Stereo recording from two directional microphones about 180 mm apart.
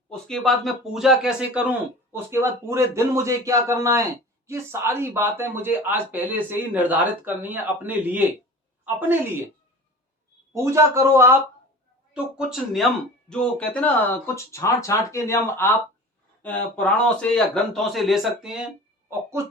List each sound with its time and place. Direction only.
0.1 s speech: 5° left (ahead or behind)
10.5 s speech: 15° right (ahead or behind)
12.1 s speech: 5° right (ahead or behind)